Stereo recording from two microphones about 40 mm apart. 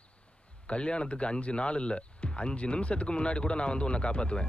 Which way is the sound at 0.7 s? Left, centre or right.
Left.